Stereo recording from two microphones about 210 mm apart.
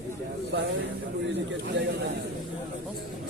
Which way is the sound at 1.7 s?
60° right (ahead or behind).